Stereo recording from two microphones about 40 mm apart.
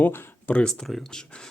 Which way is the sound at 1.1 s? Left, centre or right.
Centre.